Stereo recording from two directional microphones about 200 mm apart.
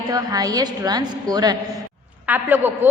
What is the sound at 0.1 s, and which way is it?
A woman's voice, 20° right (ahead or behind).